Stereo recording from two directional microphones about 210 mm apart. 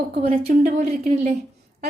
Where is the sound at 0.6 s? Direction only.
40° right (ahead or behind).